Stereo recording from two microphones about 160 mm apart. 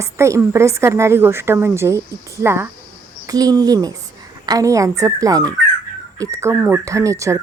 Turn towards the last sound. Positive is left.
turn(degrees=-20)  # may be behind; listen again after turning